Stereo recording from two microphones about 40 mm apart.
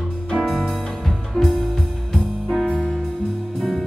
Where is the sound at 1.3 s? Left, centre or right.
Centre.